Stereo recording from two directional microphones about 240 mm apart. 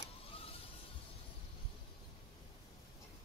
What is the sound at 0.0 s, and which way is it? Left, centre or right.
Vehicle, left.